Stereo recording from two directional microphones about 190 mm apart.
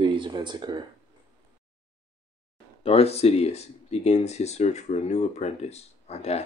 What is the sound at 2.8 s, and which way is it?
Speech, 30° left (ahead or behind).